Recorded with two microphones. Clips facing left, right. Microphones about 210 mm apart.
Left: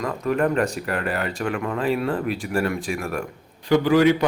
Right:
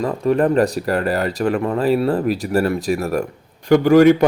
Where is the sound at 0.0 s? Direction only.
35° right (ahead or behind).